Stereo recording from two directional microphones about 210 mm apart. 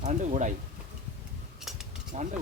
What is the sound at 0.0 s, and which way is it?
Speech, 35° right (ahead or behind).